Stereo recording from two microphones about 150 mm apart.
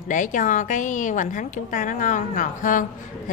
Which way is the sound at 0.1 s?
60° left (ahead or behind).